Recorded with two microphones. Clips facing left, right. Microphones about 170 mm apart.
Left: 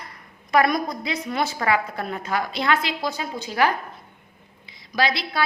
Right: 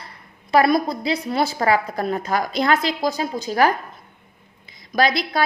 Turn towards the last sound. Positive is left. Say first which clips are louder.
# right 4 dB
turn(degrees=-45)  # may be behind; listen again after turning